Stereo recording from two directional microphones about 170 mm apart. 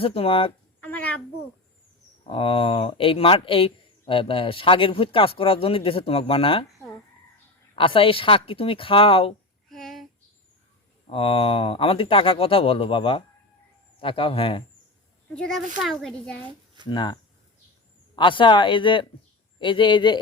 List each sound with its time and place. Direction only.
0.0 s speech: 35° left (ahead or behind)
0.8 s a sound: 10° left (ahead or behind)
2.3 s speech: 30° left (ahead or behind)
7.8 s speech: 30° left (ahead or behind)
9.6 s a sound: centre (ahead or behind)
11.1 s speech: 30° left (ahead or behind)
15.3 s speech: 5° left (ahead or behind)
16.8 s speech: 25° left (ahead or behind)
18.2 s speech: 30° left (ahead or behind)